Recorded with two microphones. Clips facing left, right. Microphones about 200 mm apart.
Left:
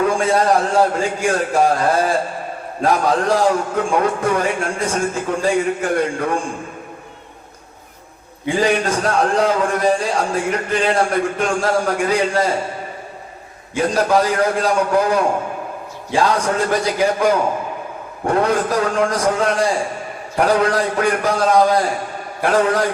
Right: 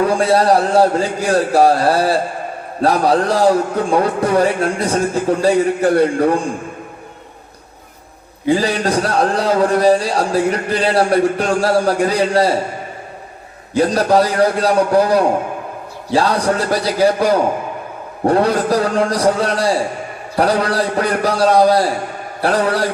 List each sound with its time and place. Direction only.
0.0 s a man's voice: 35° right (ahead or behind)
8.4 s a man's voice: 35° right (ahead or behind)
13.7 s a man's voice: 35° right (ahead or behind)